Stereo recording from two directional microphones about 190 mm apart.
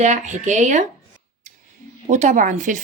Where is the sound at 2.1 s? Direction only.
40° right (ahead or behind).